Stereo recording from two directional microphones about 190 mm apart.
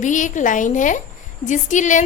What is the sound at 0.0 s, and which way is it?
A woman's voice, 40° left (ahead or behind).